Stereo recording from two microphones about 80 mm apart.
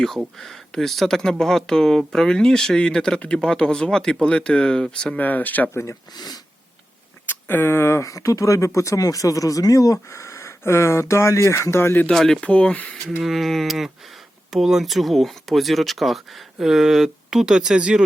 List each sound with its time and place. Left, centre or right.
0.3 s speech: centre; by 5.7 s left
5.7 s speech: left
6.1 s speech: left
7.3 s speech: left
8.0 s speech: left
12.1 s speech: centre
12.5 s speech: centre
13.2 s speech: centre